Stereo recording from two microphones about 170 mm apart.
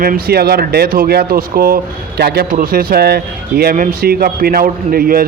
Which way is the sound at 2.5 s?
55° right (ahead or behind).